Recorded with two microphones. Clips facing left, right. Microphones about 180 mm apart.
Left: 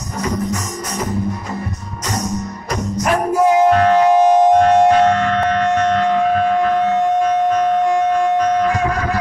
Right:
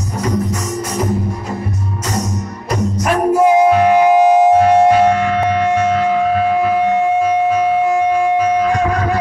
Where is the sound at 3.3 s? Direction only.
10° right (ahead or behind).